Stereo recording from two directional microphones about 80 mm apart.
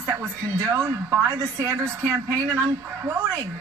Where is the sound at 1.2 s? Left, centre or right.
Right.